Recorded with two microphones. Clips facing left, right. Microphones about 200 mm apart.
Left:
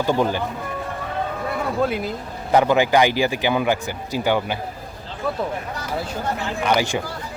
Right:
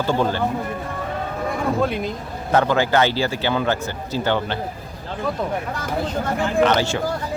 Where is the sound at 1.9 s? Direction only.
5° left (ahead or behind).